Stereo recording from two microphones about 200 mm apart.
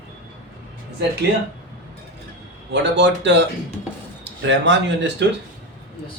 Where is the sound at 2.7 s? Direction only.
60° right (ahead or behind).